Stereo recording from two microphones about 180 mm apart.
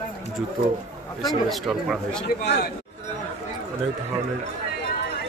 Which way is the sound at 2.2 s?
65° left (ahead or behind).